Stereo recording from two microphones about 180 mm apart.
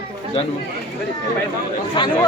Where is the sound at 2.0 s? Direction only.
25° left (ahead or behind).